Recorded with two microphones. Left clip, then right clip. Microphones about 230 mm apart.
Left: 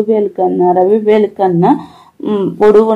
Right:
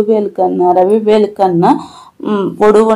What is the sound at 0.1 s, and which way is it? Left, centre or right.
A woman's voice, right.